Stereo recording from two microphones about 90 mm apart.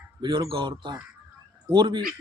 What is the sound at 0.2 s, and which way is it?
Speech, 60° right (ahead or behind).